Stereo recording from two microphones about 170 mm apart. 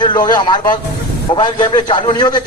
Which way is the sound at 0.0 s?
25° left (ahead or behind).